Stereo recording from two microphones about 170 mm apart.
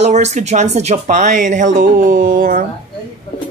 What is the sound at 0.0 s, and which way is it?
Speech, 45° right (ahead or behind).